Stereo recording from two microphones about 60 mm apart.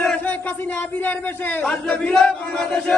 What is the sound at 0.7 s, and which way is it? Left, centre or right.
Speech, left.